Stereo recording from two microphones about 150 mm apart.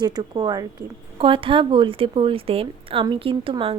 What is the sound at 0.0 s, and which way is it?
Speech, 30° right (ahead or behind).